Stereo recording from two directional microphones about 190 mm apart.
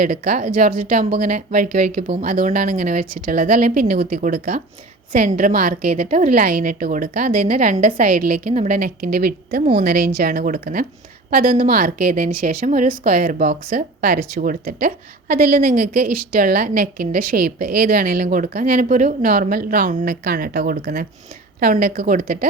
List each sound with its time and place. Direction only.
0.0 s a woman's voice: 50° right (ahead or behind)